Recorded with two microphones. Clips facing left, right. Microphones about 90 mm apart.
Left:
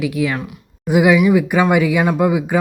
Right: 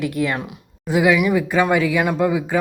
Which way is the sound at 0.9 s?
20° left (ahead or behind).